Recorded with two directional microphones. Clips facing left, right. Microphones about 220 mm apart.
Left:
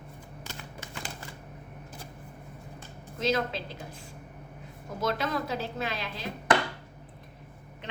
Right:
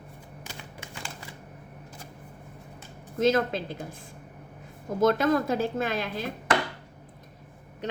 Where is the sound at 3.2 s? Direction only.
50° right (ahead or behind).